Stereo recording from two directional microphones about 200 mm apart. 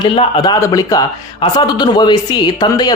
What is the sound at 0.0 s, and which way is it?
A man's voice, 25° left (ahead or behind).